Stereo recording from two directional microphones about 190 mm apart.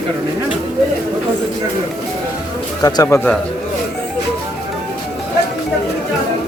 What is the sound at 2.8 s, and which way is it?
Speech, 20° left (ahead or behind).